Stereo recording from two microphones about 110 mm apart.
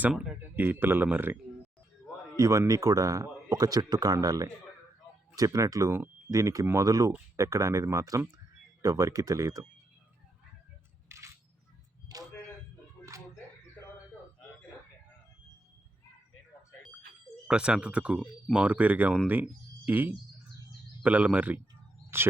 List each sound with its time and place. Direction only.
0.5 s speech: 15° right (ahead or behind)
2.3 s speech: 30° right (ahead or behind)
11.1 s a sound: 25° right (ahead or behind)
17.5 s speech: 10° right (ahead or behind)